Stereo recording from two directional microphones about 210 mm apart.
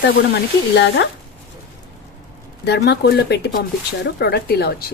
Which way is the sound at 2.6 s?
50° left (ahead or behind).